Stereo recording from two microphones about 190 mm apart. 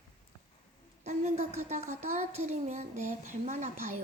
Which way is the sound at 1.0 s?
35° right (ahead or behind).